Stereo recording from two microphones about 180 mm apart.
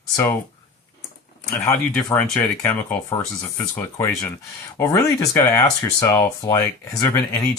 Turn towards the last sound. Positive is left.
turn(degrees=15)  # may be behind; listen again after turning